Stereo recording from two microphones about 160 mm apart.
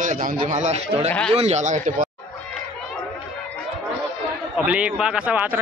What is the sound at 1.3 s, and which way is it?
Speech, 45° right (ahead or behind).